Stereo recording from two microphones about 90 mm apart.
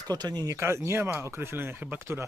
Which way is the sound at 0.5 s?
30° right (ahead or behind).